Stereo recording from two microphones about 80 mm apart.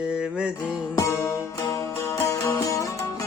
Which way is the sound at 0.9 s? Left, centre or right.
Left.